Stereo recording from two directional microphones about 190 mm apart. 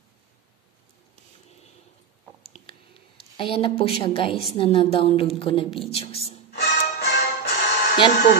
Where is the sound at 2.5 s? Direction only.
30° left (ahead or behind).